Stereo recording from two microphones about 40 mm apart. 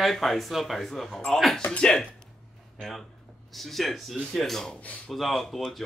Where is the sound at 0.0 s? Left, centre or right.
Centre.